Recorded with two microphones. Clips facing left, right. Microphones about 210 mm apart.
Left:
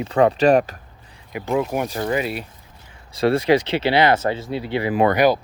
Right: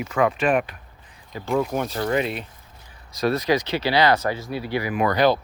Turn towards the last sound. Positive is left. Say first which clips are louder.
# left 2 dB
turn(degrees=15)  # may be behind; listen again after turning